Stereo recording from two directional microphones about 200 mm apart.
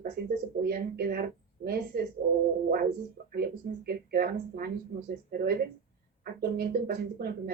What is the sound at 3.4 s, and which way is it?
Speech, 50° right (ahead or behind).